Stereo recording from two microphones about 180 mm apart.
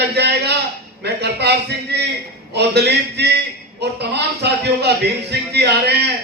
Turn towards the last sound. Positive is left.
turn(degrees=-65)  # may be behind; listen again after turning